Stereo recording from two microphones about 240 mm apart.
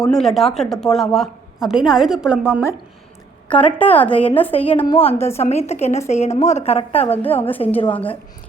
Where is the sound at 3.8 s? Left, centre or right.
Centre.